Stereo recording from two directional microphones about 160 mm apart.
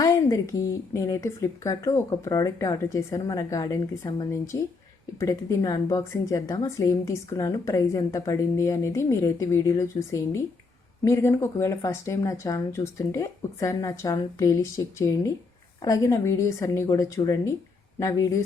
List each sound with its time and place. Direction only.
0.0 s a woman's voice: 20° left (ahead or behind)